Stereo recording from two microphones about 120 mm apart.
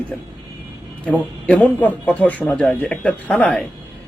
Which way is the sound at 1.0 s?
10° left (ahead or behind).